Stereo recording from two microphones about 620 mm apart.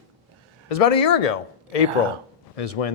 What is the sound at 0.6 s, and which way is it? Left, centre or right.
Speech, left.